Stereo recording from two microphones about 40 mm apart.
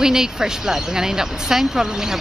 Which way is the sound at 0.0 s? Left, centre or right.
Centre.